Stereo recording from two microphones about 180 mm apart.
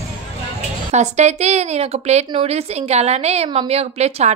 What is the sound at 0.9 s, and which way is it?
A woman's voice, 40° right (ahead or behind).